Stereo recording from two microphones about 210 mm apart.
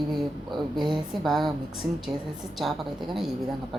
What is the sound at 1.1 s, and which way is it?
A woman's voice, centre (ahead or behind).